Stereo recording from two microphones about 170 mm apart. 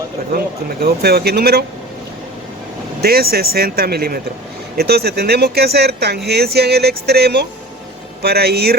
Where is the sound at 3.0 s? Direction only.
65° right (ahead or behind).